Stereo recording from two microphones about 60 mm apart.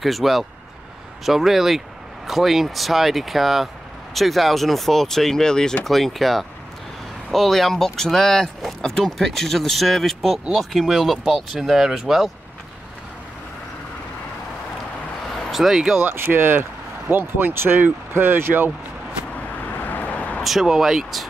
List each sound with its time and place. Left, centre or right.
0.0 s speech: centre
15.5 s speech: centre
16.0 s speech: right
19.6 s vehicle: left
20.4 s speech: centre